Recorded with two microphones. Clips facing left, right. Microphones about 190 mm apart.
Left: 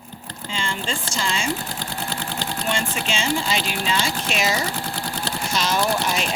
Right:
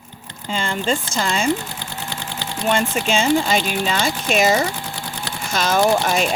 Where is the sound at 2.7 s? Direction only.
50° right (ahead or behind).